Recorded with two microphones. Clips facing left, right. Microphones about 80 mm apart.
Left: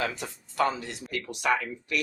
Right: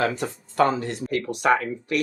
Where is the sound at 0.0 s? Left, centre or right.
Right.